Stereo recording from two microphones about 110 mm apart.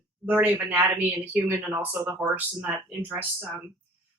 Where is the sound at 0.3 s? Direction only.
15° right (ahead or behind).